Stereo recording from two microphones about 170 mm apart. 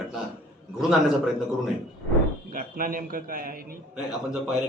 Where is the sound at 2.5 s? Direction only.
55° right (ahead or behind).